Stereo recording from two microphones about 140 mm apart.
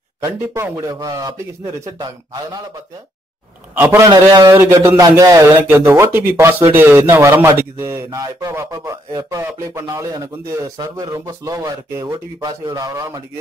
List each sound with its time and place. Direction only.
0.2 s speech: 15° right (ahead or behind)
3.7 s speech: 20° right (ahead or behind)
4.1 s speech: 30° right (ahead or behind)